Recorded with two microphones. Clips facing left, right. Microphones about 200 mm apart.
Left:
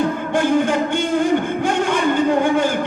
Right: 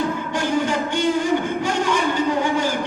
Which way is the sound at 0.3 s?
55° left (ahead or behind).